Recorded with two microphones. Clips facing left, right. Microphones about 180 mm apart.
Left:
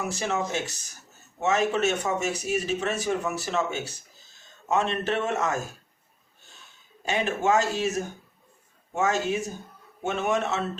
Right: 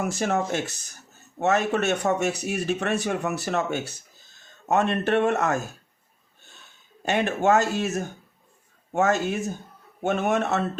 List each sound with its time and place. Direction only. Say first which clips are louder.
0.0 s speech: right 3 dB; 55° right (ahead or behind)
7.0 s speech: right 3 dB; 60° right (ahead or behind)